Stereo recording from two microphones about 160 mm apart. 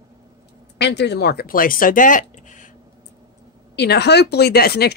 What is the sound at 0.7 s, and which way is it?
Speech, 90° left.